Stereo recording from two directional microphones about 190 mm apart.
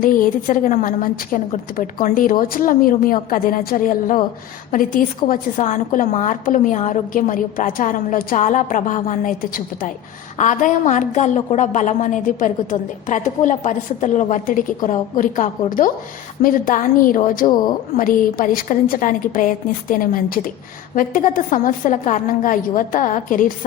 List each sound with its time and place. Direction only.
0.0 s a woman's voice: 45° left (ahead or behind)
10.3 s a woman's voice: 40° left (ahead or behind)